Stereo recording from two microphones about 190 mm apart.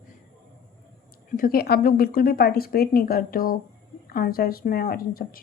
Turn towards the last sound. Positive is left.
turn(degrees=50)  # may be behind; listen again after turning